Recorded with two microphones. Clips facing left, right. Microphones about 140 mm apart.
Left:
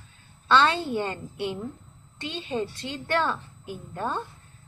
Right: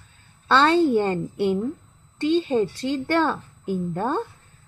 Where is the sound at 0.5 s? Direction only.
45° right (ahead or behind).